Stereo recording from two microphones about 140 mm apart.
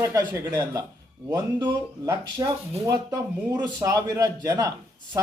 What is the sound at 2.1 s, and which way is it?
A man's voice, 25° right (ahead or behind).